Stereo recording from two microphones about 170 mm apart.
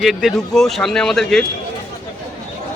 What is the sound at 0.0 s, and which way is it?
Speech, centre (ahead or behind).